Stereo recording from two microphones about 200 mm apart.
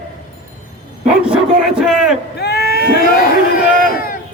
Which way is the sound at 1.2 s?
5° right (ahead or behind).